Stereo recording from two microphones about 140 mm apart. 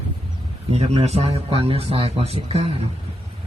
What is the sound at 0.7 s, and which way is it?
A man's voice, 50° right (ahead or behind).